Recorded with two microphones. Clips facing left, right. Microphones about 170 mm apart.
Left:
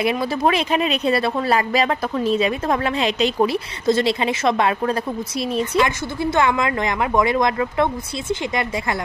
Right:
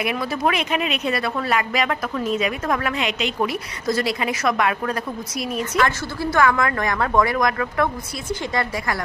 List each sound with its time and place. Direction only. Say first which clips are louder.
0.0 s speech: left 3 dB; 30° left (ahead or behind)